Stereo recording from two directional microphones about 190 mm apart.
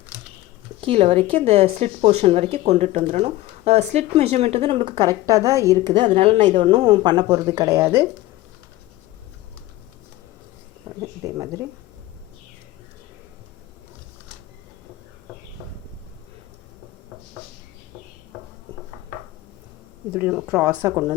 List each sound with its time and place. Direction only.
0.8 s speech: 30° right (ahead or behind)
6.1 s a woman's voice: 35° right (ahead or behind); by 8.0 s 15° right (ahead or behind)
10.8 s speech: 15° right (ahead or behind)
20.1 s speech: 10° right (ahead or behind)